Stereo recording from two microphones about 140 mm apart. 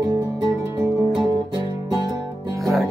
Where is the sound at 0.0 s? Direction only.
25° right (ahead or behind).